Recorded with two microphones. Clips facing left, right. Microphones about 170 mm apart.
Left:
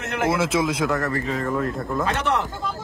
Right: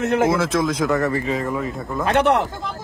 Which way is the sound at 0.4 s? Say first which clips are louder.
Right 2 dB; 5° left (ahead or behind).